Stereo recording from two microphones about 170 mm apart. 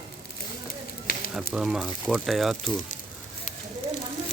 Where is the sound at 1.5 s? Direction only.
5° right (ahead or behind).